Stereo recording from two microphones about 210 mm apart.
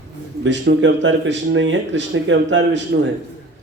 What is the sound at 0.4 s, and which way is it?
Speech, 55° right (ahead or behind).